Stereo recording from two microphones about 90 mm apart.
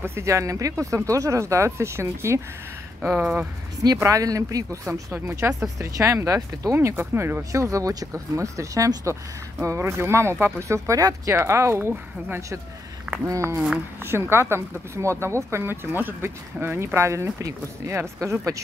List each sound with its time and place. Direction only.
0.0 s speech: 30° right (ahead or behind)
3.2 s speech: 10° right (ahead or behind)
4.0 s speech: 40° right (ahead or behind)
4.8 s speech: 30° right (ahead or behind)
10.9 s speech: 40° right (ahead or behind)
13.3 s speech: 30° right (ahead or behind)